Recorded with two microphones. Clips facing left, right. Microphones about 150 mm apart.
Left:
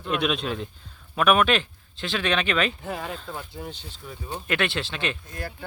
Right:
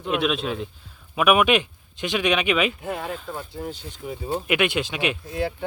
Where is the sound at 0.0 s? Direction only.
Centre (ahead or behind).